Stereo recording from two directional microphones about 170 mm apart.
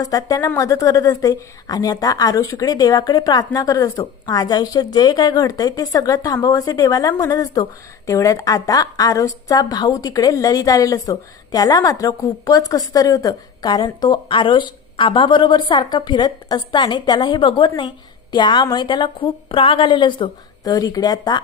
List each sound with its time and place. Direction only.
0.0 s a woman's voice: 20° left (ahead or behind)